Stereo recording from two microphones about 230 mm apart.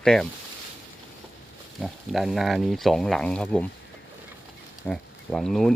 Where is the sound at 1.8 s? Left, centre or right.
Centre.